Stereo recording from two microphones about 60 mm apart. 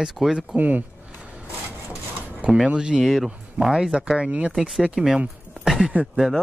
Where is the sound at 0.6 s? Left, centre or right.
Right.